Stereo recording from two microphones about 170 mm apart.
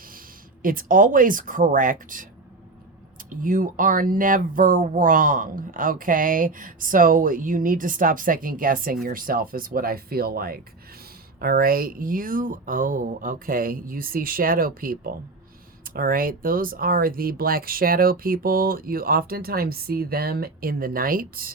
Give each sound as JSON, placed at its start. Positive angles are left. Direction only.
{"t": 0.6, "sound": "speech", "side_deg": -55}
{"t": 3.2, "sound": "speech", "side_deg": -50}